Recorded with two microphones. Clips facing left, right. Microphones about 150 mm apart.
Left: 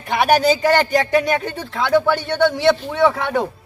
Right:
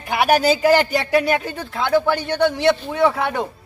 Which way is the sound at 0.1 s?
5° right (ahead or behind).